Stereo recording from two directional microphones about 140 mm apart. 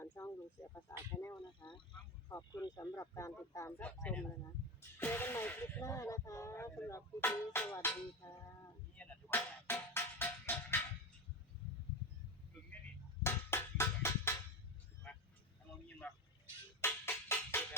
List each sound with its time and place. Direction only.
0.0 s a sound: 20° left (ahead or behind)
0.7 s speech: 20° left (ahead or behind)
3.9 s speech: 5° left (ahead or behind)
9.0 s music: 15° left (ahead or behind)
13.2 s music: 20° left (ahead or behind)
16.0 s vehicle: 10° left (ahead or behind)
16.8 s music: 15° left (ahead or behind)